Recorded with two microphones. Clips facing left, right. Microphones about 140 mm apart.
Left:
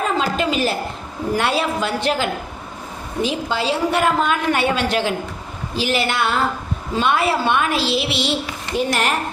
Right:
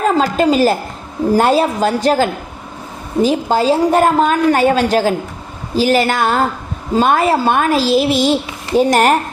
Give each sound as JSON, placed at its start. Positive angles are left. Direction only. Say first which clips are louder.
{"t": 0.0, "sound": "a woman's voice", "louder": "right 7 dB", "side_deg": -40}